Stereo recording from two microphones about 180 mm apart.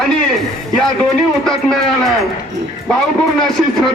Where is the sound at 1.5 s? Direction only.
Centre (ahead or behind).